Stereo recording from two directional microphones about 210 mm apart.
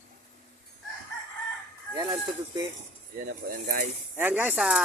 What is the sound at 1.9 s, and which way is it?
Speech, 20° right (ahead or behind).